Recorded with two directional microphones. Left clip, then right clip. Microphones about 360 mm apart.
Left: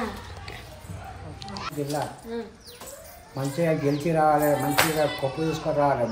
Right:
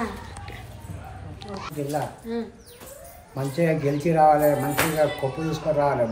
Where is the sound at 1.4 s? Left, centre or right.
Centre.